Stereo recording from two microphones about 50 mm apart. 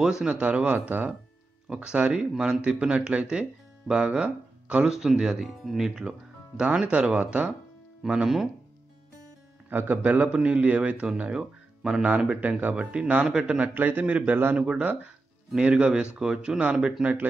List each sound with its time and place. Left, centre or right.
0.0 s speech: centre
0.7 s a man's voice: right
1.7 s speech: right
2.3 s speech: centre
2.6 s speech: centre
4.8 s speech: centre
9.7 s speech: right
11.1 s speech: centre
12.4 s a man's voice: right
12.7 s speech: right
13.7 s a man's voice: right
15.5 s speech: right